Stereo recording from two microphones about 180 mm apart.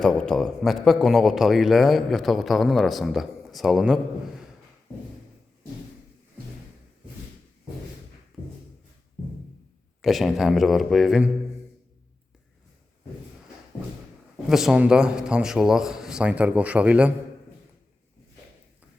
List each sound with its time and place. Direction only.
0.0 s a man's voice: 5° left (ahead or behind)
10.0 s a man's voice: centre (ahead or behind)
14.5 s a man's voice: 5° right (ahead or behind)